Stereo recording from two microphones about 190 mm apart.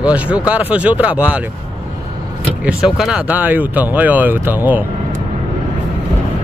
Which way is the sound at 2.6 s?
5° right (ahead or behind).